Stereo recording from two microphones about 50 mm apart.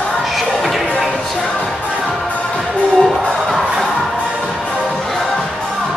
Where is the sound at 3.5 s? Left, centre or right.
Centre.